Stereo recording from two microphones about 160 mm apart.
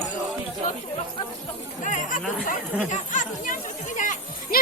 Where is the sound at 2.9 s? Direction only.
55° left (ahead or behind).